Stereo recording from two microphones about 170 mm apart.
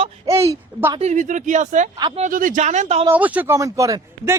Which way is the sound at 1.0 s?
45° right (ahead or behind).